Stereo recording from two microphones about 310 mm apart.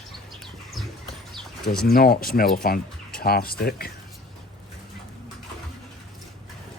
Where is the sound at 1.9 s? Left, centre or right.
Left.